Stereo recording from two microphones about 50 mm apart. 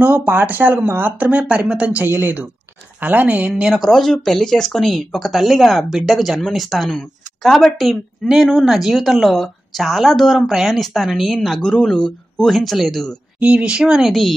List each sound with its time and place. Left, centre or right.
0.0 s speech: right
1.7 s a woman's voice: right
2.0 s a woman's voice: right
3.7 s speech: centre
13.4 s a woman's voice: right
13.8 s speech: centre